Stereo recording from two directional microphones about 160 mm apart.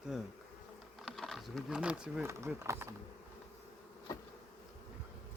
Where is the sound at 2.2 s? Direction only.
15° right (ahead or behind).